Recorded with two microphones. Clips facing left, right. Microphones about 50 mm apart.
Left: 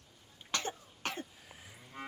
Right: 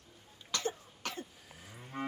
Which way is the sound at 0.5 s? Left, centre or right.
Left.